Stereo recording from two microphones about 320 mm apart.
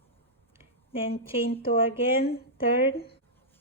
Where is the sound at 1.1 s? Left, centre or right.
Centre.